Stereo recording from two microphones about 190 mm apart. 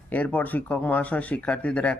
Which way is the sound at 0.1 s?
10° left (ahead or behind).